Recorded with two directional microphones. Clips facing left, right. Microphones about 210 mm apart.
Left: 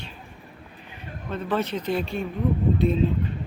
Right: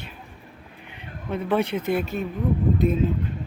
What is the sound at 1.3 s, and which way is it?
Speech, 10° right (ahead or behind).